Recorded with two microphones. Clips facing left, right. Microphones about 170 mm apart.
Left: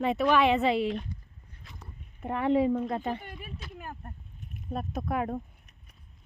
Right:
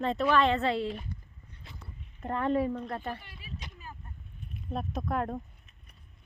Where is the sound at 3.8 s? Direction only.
55° left (ahead or behind).